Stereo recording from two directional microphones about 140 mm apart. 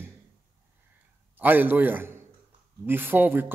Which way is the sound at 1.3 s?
15° right (ahead or behind).